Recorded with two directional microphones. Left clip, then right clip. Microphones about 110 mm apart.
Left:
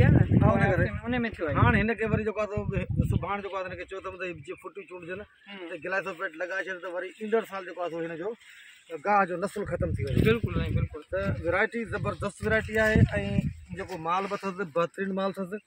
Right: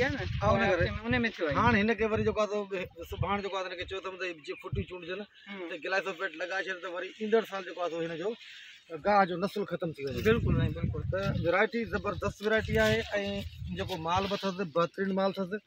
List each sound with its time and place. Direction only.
0.0 s a sound: 20° left (ahead or behind)
0.8 s speech: 50° left (ahead or behind)
1.5 s a man's voice: 10° left (ahead or behind); by 4.6 s 10° right (ahead or behind)
5.9 s a man's voice: 25° right (ahead or behind)
7.7 s speech: 5° right (ahead or behind)
9.0 s speech: 40° right (ahead or behind)
10.2 s speech: 25° left (ahead or behind)
11.1 s speech: 5° right (ahead or behind)
11.4 s a man's voice: 5° left (ahead or behind)
11.9 s speech: 15° left (ahead or behind)
12.4 s a man's voice: 5° left (ahead or behind); by 14.9 s 10° right (ahead or behind)
15.0 s a man's voice: 5° left (ahead or behind)